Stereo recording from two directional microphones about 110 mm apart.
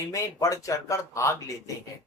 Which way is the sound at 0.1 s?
30° left (ahead or behind).